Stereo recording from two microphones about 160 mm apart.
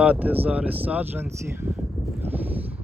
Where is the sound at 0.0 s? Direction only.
10° right (ahead or behind).